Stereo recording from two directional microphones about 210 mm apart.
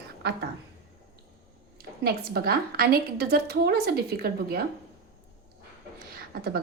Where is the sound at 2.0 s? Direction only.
50° right (ahead or behind).